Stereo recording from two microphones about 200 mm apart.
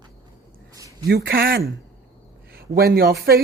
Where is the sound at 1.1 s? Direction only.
50° right (ahead or behind).